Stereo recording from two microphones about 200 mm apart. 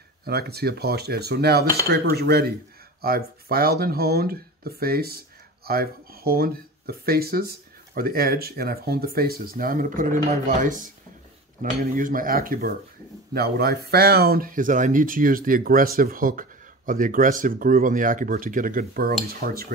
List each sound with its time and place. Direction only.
0.2 s speech: 50° right (ahead or behind)